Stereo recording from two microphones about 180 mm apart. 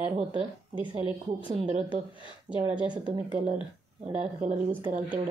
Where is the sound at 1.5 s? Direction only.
25° right (ahead or behind).